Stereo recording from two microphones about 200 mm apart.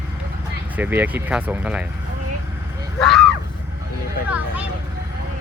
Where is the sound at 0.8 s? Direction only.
10° right (ahead or behind).